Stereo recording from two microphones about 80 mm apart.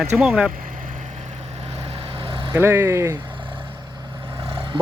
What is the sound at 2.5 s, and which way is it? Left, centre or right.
Speech, right.